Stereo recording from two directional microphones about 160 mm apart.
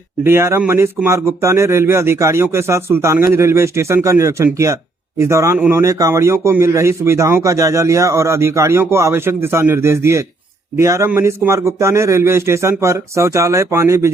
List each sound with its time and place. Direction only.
0.3 s speech: 15° right (ahead or behind)